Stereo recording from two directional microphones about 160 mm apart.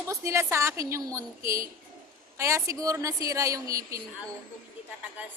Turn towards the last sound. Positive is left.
turn(degrees=-20)  # may be behind; listen again after turning